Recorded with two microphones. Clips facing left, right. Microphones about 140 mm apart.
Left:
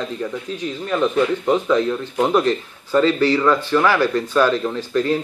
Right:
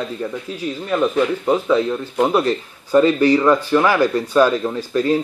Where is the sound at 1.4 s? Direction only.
10° right (ahead or behind).